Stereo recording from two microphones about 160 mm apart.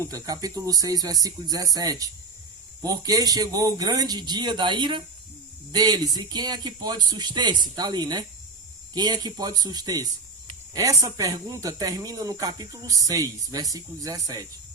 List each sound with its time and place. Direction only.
0.0 s speech: 20° right (ahead or behind)